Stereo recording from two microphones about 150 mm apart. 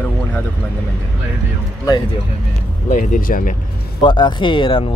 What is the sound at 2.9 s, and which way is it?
Speech, 60° left (ahead or behind).